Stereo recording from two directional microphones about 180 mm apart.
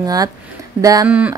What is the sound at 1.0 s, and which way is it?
Speech, 10° right (ahead or behind).